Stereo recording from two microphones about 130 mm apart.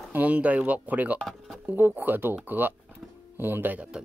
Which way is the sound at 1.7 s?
15° right (ahead or behind).